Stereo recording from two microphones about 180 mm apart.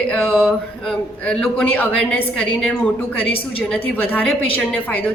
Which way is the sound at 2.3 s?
5° left (ahead or behind).